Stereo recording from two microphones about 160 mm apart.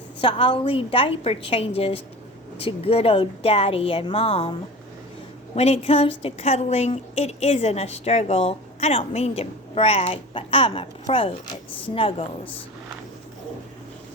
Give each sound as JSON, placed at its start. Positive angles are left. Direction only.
{"t": 0.2, "sound": "a woman's voice", "side_deg": 35}
{"t": 5.5, "sound": "a woman's voice", "side_deg": 40}